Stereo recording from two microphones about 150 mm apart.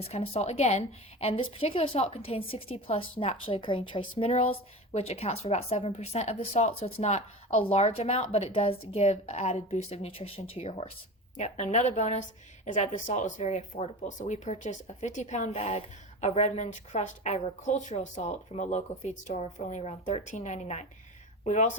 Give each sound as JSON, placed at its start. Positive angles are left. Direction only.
{"t": 0.0, "sound": "a woman's voice", "side_deg": 40}
{"t": 11.3, "sound": "a woman's voice", "side_deg": 50}